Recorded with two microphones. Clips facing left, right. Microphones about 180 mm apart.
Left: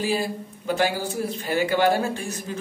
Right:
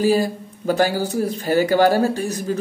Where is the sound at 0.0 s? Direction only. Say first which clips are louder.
Right 7 dB; 40° right (ahead or behind).